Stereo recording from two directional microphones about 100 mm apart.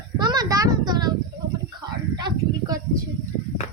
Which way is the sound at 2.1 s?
45° right (ahead or behind).